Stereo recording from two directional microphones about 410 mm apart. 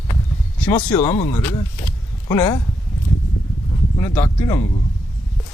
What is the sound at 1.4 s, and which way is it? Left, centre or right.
Speech, centre.